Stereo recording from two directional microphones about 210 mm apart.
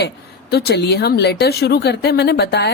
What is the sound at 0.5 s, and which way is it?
A woman's voice, 50° left (ahead or behind).